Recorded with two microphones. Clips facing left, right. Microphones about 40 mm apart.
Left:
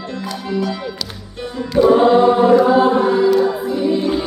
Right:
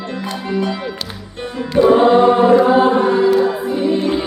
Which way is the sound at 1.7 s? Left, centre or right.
Centre.